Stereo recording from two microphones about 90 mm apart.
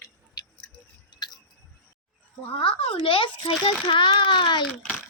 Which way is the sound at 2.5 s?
90° left.